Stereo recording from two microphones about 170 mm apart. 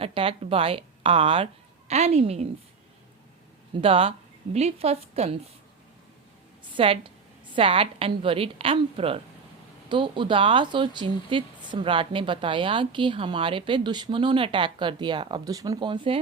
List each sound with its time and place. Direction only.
0.0 s a woman's voice: 35° right (ahead or behind)
3.8 s a woman's voice: 35° right (ahead or behind)
6.7 s a woman's voice: 30° right (ahead or behind)